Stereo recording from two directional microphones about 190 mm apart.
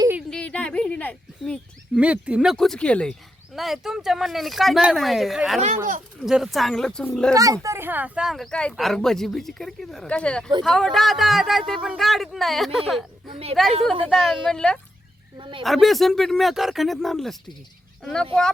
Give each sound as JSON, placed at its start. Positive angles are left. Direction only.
{"t": 0.2, "sound": "a sound", "side_deg": 5}
{"t": 2.0, "sound": "speech", "side_deg": -5}
{"t": 5.5, "sound": "speech", "side_deg": -35}
{"t": 6.1, "sound": "speech", "side_deg": 0}
{"t": 7.3, "sound": "speech", "side_deg": -15}
{"t": 15.4, "sound": "speech", "side_deg": -25}
{"t": 15.6, "sound": "speech", "side_deg": 0}